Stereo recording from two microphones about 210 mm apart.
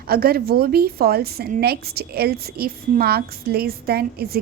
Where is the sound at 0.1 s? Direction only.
45° right (ahead or behind).